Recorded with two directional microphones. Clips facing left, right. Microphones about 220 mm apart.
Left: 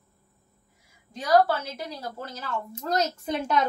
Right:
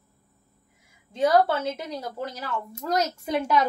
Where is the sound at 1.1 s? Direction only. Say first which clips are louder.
Right 1 dB; 25° right (ahead or behind).